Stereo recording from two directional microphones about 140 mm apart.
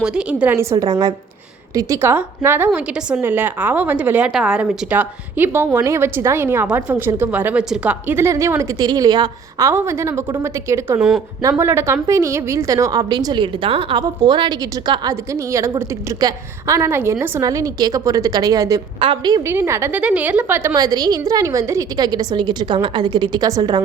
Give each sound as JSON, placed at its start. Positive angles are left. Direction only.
{"t": 0.0, "sound": "a woman's voice", "side_deg": -5}
{"t": 18.9, "sound": "a woman's voice", "side_deg": -40}
{"t": 19.5, "sound": "a woman's voice", "side_deg": -20}
{"t": 20.7, "sound": "a woman's voice", "side_deg": -25}